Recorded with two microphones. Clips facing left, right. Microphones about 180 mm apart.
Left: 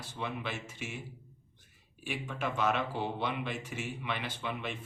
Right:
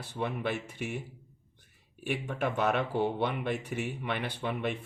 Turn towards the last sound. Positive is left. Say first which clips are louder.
# right 5 dB
turn(degrees=-60)  # may be behind; listen again after turning